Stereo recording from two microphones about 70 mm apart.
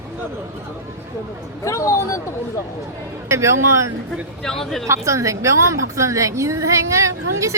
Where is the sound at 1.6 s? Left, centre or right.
Left.